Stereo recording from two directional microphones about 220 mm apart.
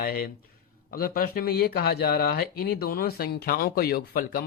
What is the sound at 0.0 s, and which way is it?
Speech, 45° left (ahead or behind).